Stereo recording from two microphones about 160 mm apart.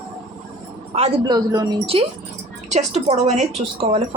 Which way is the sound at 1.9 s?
35° right (ahead or behind).